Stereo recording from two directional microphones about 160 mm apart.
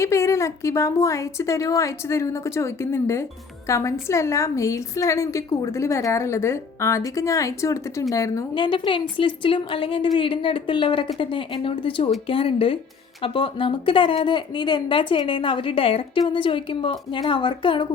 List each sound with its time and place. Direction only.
0.0 s a woman's voice: 15° left (ahead or behind)